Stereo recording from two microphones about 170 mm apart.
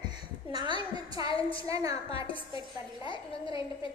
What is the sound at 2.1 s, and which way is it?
Speech, 30° left (ahead or behind).